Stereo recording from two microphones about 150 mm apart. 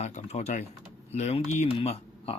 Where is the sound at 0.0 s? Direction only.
45° left (ahead or behind).